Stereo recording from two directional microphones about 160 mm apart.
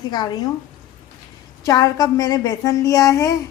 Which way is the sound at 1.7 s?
20° left (ahead or behind).